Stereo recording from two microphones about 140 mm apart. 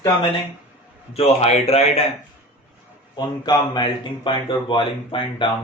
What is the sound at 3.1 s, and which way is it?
Speech, 30° left (ahead or behind).